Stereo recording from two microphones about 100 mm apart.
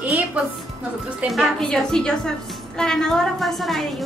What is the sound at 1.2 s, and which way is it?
A woman's voice, centre (ahead or behind).